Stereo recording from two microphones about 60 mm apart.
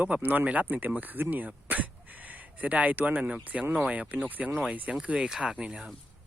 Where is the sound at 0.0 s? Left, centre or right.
Right.